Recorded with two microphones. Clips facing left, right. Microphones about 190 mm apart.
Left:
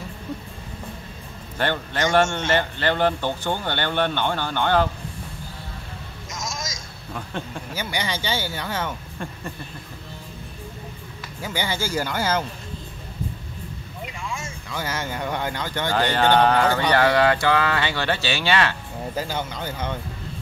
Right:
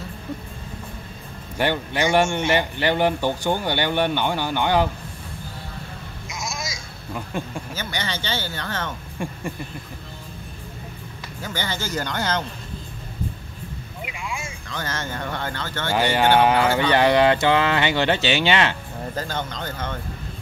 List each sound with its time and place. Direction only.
1.6 s speech: 10° right (ahead or behind)
6.2 s telephone: 10° right (ahead or behind)
7.3 s speech: 10° right (ahead or behind)
7.7 s speech: 10° left (ahead or behind)
9.2 s speech: 10° right (ahead or behind)
11.4 s speech: 10° left (ahead or behind)
14.0 s vehicle: 10° right (ahead or behind)
14.7 s speech: 10° left (ahead or behind)
15.9 s speech: 15° right (ahead or behind)
19.1 s speech: 10° left (ahead or behind)